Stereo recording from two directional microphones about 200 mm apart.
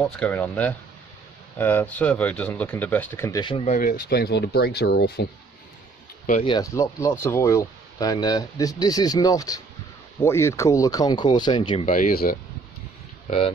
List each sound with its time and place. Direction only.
0.0 s speech: 10° left (ahead or behind); by 5.3 s 55° left (ahead or behind)
6.4 s speech: 20° left (ahead or behind)
11.8 s speech: 40° left (ahead or behind)